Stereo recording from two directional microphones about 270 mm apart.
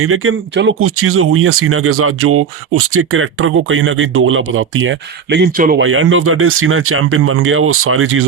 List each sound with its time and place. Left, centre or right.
0.0 s speech: right
5.8 s speech: right